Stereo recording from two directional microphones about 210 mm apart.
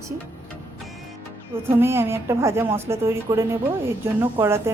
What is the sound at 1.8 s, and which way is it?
A woman's voice, 10° right (ahead or behind).